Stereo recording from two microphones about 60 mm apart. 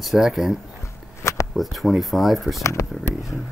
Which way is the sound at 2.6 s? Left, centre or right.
Left.